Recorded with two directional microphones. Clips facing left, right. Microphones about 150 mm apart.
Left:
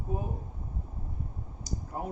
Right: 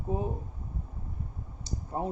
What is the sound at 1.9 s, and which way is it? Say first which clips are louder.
Speech: right 5 dB; 25° right (ahead or behind).